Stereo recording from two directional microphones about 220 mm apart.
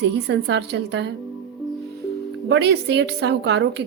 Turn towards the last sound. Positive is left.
turn(degrees=-50)  # may be behind; listen again after turning